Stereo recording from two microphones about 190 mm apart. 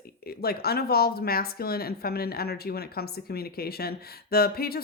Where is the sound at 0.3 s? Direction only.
55° left (ahead or behind).